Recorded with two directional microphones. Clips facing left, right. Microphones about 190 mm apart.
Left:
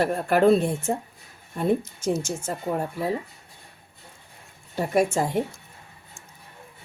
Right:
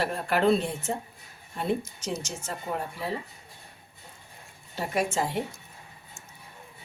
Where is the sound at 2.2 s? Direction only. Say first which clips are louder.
Left 6 dB; 45° left (ahead or behind).